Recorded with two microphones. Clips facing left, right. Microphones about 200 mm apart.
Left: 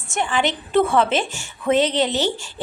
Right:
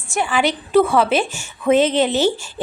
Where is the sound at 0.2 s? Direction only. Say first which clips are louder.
Right 2 dB; 10° right (ahead or behind).